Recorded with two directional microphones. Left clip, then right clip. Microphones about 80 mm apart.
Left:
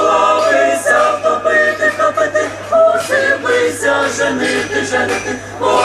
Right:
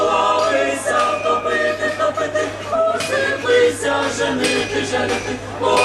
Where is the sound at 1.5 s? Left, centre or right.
Left.